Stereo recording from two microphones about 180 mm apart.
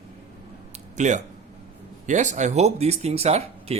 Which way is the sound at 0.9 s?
40° right (ahead or behind).